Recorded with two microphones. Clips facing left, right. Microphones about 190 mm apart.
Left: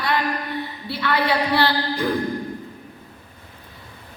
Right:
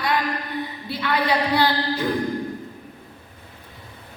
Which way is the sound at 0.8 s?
20° right (ahead or behind).